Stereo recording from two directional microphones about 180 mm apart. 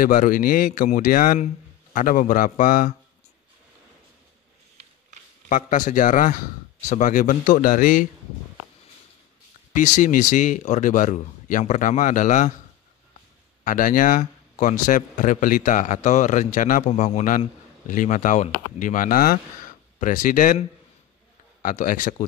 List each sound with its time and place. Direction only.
0.0 s a man's voice: 50° left (ahead or behind)
5.5 s a man's voice: 45° left (ahead or behind)
9.8 s a man's voice: 45° left (ahead or behind)
13.7 s a man's voice: 50° left (ahead or behind)
21.6 s a man's voice: 45° left (ahead or behind)